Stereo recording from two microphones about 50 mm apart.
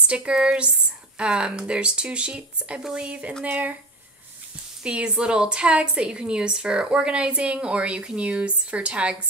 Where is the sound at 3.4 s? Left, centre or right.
Right.